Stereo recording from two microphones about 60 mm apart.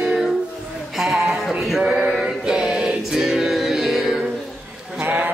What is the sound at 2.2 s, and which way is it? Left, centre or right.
Music, centre.